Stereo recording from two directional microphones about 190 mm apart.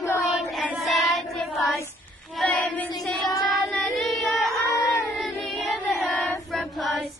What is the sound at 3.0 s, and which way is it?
Music, centre (ahead or behind).